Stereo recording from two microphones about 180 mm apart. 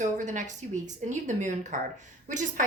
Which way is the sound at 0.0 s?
45° right (ahead or behind).